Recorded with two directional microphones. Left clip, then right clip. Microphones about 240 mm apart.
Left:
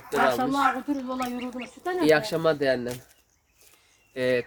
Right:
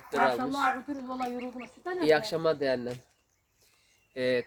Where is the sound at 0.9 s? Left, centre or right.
Left.